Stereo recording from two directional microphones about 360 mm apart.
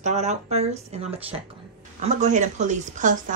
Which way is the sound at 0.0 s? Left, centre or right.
Centre.